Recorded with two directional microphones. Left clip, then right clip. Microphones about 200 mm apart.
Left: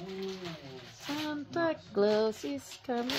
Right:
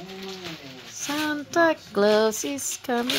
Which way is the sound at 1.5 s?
25° right (ahead or behind).